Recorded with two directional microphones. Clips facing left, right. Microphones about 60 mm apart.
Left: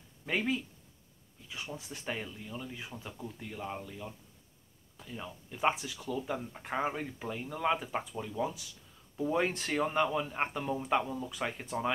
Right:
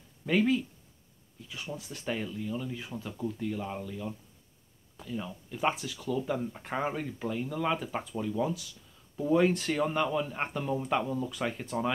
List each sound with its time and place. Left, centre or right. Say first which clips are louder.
0.3 s speech: right 6 dB; centre
1.8 s speech: right 6 dB; centre
6.1 s speech: right 5 dB; centre
9.4 s speech: right 3 dB; left